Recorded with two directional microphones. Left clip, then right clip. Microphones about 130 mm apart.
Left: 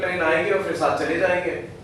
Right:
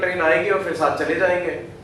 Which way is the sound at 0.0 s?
15° right (ahead or behind).